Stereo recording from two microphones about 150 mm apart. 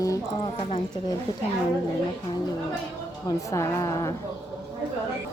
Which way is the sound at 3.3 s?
20° left (ahead or behind).